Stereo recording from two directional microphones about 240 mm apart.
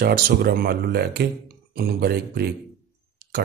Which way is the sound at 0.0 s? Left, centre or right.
Right.